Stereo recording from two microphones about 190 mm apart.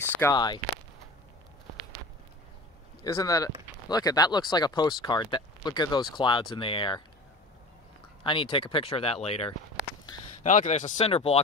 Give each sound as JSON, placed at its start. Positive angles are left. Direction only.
{"t": 0.2, "sound": "speech", "side_deg": 20}
{"t": 3.0, "sound": "speech", "side_deg": 15}
{"t": 8.2, "sound": "speech", "side_deg": 25}